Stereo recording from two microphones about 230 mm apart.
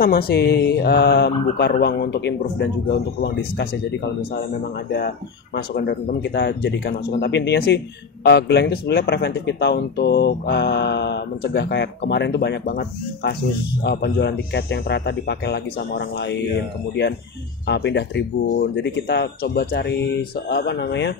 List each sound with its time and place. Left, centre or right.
0.0 s speech: left
5.8 s speech: left
17.6 s speech: left